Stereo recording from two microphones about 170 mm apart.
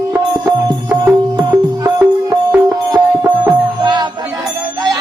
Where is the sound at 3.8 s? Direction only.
25° right (ahead or behind).